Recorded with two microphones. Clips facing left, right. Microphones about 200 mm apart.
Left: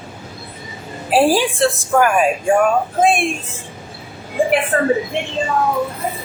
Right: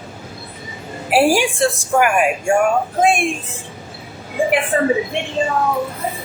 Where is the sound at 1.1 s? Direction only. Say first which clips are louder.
Even; 15° right (ahead or behind).